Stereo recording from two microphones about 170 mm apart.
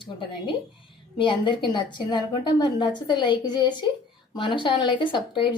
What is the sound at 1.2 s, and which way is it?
A woman's voice, 30° left (ahead or behind).